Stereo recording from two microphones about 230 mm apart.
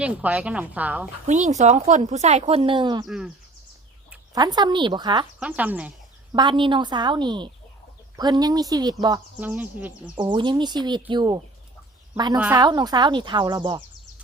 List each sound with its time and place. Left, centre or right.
0.0 s a woman's voice: centre
1.3 s speech: right
3.1 s speech: centre
4.4 s speech: centre
5.4 s speech: centre
6.3 s a woman's voice: centre
9.5 s a woman's voice: centre
10.2 s a woman's voice: right